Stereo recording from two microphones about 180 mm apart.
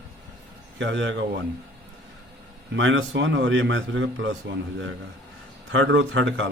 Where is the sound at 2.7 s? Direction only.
90° right.